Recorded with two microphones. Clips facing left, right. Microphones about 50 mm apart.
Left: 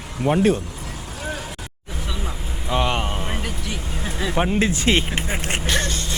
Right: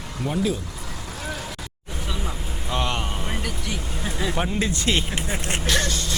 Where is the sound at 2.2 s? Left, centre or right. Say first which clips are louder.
Left 1 dB; centre.